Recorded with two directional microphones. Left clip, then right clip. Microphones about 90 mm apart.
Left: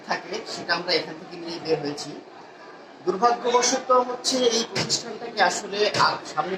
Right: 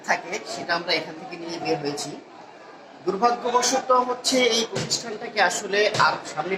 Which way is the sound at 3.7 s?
30° left (ahead or behind).